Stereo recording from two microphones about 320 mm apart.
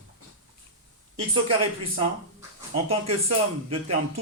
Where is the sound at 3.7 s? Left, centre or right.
Centre.